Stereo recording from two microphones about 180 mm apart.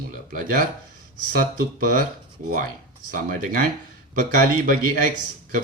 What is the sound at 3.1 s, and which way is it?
Speech, 50° right (ahead or behind).